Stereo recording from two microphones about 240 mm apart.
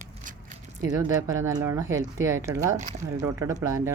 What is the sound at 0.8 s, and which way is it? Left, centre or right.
Speech, centre.